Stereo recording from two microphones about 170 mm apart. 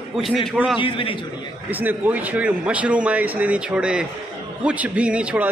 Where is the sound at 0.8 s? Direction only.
30° left (ahead or behind).